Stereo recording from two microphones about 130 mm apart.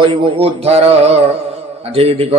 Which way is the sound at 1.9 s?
50° right (ahead or behind).